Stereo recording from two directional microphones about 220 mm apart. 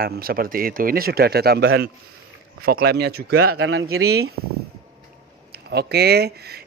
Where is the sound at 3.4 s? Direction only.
75° right (ahead or behind).